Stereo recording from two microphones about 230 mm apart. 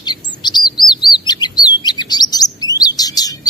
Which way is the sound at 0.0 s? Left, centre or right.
Centre.